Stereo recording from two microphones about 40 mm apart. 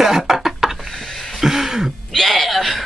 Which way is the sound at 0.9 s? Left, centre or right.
Centre.